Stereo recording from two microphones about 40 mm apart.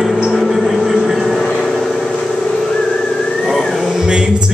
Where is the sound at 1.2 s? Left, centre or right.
Centre.